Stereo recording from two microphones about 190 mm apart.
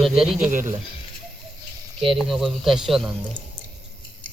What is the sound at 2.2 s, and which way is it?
Speech, centre (ahead or behind).